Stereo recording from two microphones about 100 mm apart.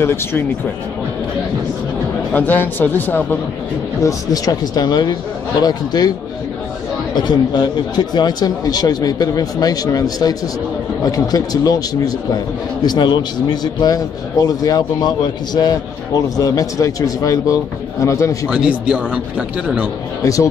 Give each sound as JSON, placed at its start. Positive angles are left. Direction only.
{"t": 0.0, "sound": "a man's voice", "side_deg": 25}
{"t": 2.3, "sound": "a man's voice", "side_deg": 20}
{"t": 4.0, "sound": "a man's voice", "side_deg": 40}
{"t": 7.2, "sound": "a man's voice", "side_deg": 45}
{"t": 18.5, "sound": "a man's voice", "side_deg": -10}